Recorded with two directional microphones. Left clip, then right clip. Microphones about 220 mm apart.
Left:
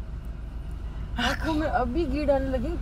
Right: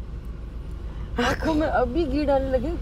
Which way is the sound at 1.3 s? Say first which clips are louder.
Right 4 dB; 40° right (ahead or behind).